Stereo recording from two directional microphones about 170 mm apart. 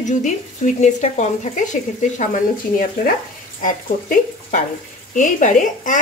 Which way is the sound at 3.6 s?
50° left (ahead or behind).